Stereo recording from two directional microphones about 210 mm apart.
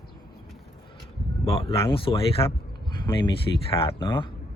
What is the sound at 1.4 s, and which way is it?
Speech, 25° left (ahead or behind).